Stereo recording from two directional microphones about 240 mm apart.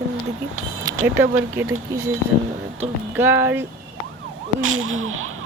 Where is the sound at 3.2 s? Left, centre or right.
Centre.